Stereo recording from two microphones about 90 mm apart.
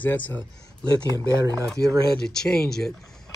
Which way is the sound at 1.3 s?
40° right (ahead or behind).